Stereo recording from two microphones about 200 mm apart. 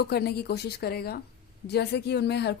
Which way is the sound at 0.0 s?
55° left (ahead or behind).